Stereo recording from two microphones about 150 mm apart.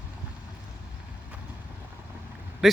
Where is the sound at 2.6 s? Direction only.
Centre (ahead or behind).